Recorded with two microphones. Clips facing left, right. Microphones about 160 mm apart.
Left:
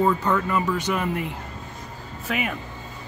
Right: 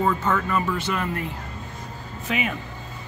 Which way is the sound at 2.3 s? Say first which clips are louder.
Right 1 dB; centre (ahead or behind).